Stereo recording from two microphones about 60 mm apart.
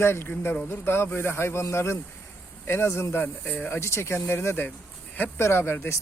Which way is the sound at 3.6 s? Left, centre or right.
Left.